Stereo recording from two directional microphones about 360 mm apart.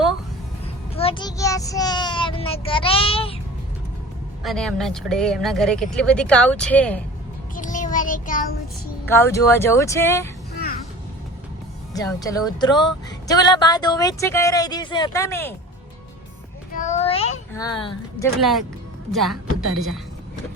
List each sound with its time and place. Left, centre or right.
0.9 s speech: centre
4.4 s speech: centre
7.5 s a child's voice: left
9.0 s speech: centre
11.9 s speech: centre
16.7 s a sound: centre
17.5 s a woman's voice: centre
19.1 s speech: centre